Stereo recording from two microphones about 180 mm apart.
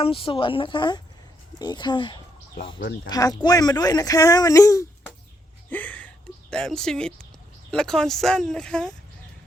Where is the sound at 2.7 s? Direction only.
70° left (ahead or behind).